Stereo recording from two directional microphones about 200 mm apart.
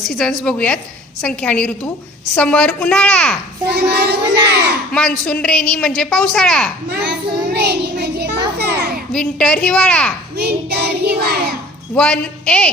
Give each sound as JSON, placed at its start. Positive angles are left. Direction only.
{"t": 0.0, "sound": "a woman's voice", "side_deg": 0}
{"t": 3.7, "sound": "child singing", "side_deg": -55}
{"t": 4.9, "sound": "a woman's voice", "side_deg": 5}
{"t": 6.9, "sound": "child singing", "side_deg": -55}
{"t": 9.1, "sound": "a woman's voice", "side_deg": 5}
{"t": 10.3, "sound": "child singing", "side_deg": -55}
{"t": 11.9, "sound": "a woman's voice", "side_deg": 5}